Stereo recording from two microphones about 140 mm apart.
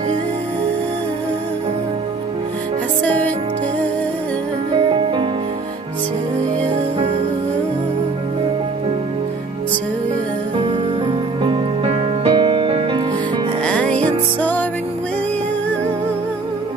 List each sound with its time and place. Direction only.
4.7 s music: 35° right (ahead or behind)
11.4 s music: 40° right (ahead or behind)
13.7 s music: 10° left (ahead or behind)